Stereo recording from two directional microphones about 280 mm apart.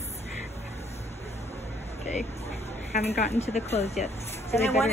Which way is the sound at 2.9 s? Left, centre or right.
Left.